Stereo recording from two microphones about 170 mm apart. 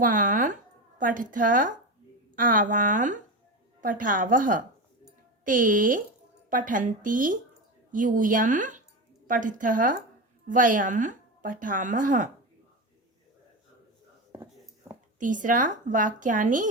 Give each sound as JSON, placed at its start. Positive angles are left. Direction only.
{"t": 0.0, "sound": "a woman's voice", "side_deg": -50}
{"t": 14.8, "sound": "a sound", "side_deg": -15}
{"t": 15.2, "sound": "a woman's voice", "side_deg": -50}